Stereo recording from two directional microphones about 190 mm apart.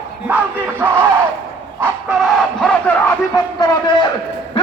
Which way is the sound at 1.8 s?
Centre (ahead or behind).